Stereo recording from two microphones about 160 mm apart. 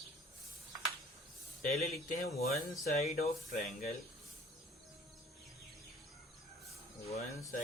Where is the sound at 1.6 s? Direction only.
50° left (ahead or behind).